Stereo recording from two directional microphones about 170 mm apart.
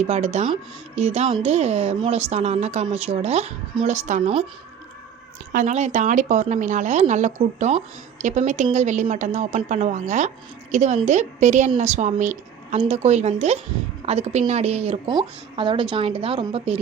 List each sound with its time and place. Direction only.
0.0 s speech: 40° right (ahead or behind)
5.5 s a woman's voice: 45° right (ahead or behind)